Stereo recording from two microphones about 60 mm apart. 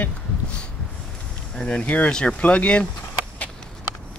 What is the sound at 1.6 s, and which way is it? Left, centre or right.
Speech, centre.